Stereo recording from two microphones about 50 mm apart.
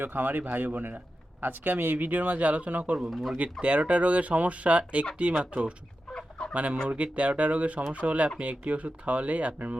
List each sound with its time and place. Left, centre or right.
0.0 s speech: right
3.1 s speech: centre
3.3 s speech: right
6.1 s fowl: centre
6.5 s speech: right